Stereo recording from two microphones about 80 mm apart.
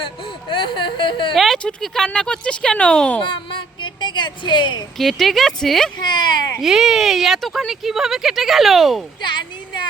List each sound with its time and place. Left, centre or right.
0.5 s a sound: left
1.3 s a child's voice: centre
3.2 s a child's voice: left
4.9 s speech: centre
6.0 s speech: left
6.6 s speech: centre
9.2 s a sound: left